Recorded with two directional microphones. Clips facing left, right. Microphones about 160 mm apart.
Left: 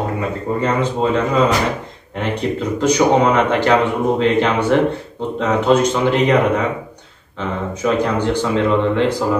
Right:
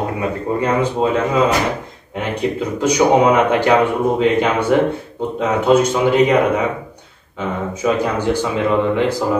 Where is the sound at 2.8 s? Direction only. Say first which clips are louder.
Right 1 dB; 10° right (ahead or behind).